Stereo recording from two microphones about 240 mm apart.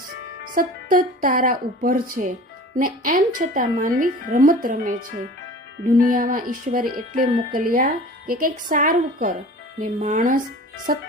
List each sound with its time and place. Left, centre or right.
0.5 s speech: right